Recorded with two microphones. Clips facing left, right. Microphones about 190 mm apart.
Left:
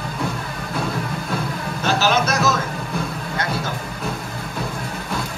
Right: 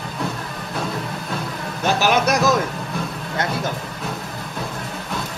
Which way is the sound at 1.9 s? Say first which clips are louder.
Right 1 dB; 15° right (ahead or behind).